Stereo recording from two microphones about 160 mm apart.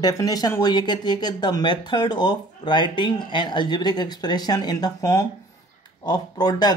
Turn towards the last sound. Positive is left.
turn(degrees=25)  # may be behind; listen again after turning